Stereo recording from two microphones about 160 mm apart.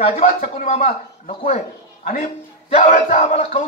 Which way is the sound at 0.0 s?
40° left (ahead or behind).